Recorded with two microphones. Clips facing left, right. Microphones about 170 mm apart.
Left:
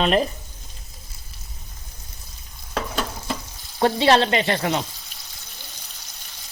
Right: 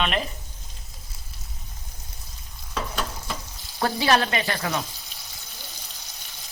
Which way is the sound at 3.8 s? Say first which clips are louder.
Left 5 dB; 25° left (ahead or behind).